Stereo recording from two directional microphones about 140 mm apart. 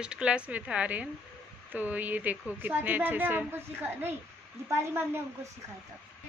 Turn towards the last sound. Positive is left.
turn(degrees=-20)  # may be behind; listen again after turning